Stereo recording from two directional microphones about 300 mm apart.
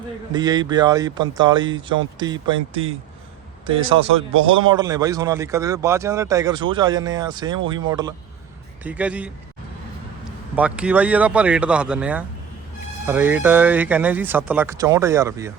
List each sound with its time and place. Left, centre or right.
0.3 s speech: centre
3.8 s speech: right
4.4 s speech: centre
10.5 s speech: centre